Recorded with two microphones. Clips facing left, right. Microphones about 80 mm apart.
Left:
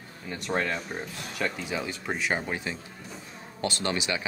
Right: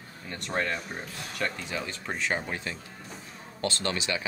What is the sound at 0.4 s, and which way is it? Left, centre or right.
Speech, centre.